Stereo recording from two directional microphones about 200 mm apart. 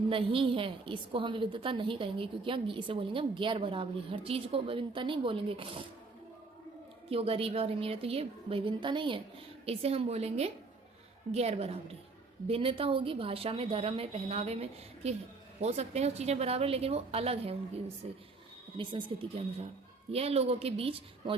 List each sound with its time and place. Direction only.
0.1 s a woman's voice: 25° right (ahead or behind)
7.1 s a woman's voice: 30° right (ahead or behind)